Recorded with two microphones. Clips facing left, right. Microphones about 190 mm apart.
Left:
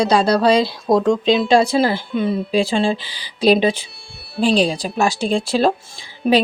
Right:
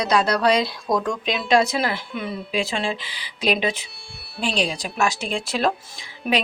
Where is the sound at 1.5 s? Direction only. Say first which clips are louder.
Left 1 dB; 30° left (ahead or behind).